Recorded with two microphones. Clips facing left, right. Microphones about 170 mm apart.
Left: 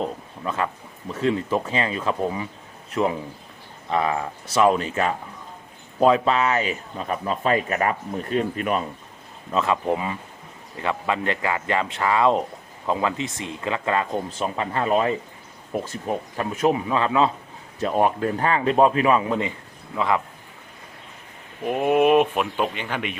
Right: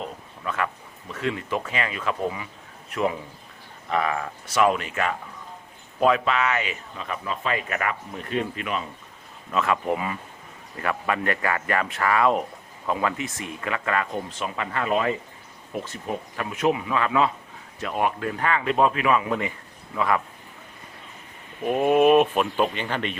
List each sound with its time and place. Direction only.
0.0 s speech: 30° left (ahead or behind)
9.5 s speech: 25° left (ahead or behind)
21.6 s speech: 10° left (ahead or behind)